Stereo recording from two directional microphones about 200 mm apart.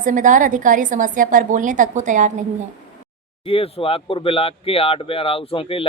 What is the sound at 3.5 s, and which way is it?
Speech, 30° left (ahead or behind).